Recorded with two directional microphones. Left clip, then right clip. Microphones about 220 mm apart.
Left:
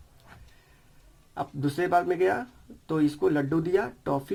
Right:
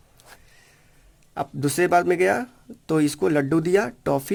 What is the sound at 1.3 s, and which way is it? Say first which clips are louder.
Speech: right 5 dB; 45° right (ahead or behind).